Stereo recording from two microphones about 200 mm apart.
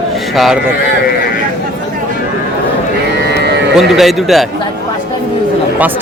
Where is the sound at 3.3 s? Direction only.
55° right (ahead or behind).